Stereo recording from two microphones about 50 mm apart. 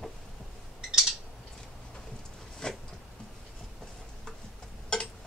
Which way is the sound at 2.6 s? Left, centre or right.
Centre.